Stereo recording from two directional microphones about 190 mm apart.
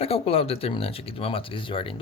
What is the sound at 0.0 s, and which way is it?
Speech, 30° left (ahead or behind).